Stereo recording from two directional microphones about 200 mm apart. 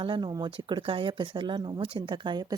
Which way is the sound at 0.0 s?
25° right (ahead or behind).